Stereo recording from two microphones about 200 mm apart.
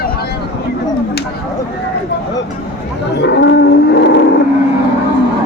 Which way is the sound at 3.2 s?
60° left (ahead or behind).